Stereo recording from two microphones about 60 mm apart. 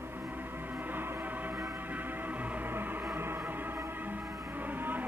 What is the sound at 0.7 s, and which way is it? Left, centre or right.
Music, right.